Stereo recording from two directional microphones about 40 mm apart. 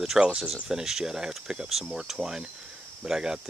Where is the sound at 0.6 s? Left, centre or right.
Centre.